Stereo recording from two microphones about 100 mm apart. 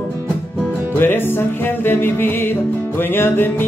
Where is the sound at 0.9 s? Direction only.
20° left (ahead or behind).